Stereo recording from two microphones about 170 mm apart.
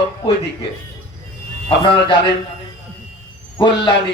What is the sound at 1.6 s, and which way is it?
Speech, 30° left (ahead or behind).